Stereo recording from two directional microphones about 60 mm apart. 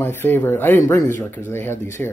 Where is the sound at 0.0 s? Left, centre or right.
Left.